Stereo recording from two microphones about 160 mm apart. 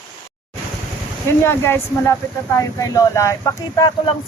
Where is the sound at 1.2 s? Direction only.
15° left (ahead or behind).